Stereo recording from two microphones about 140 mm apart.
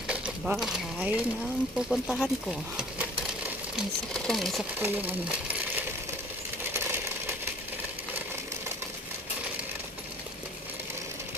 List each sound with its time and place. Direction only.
0.1 s a sound: 5° right (ahead or behind)
4.1 s speech: centre (ahead or behind)
4.7 s speech: 10° right (ahead or behind)
6.7 s coin: 20° right (ahead or behind)